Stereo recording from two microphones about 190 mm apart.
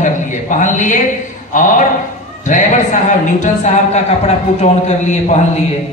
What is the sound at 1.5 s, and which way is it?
Speech, 45° left (ahead or behind).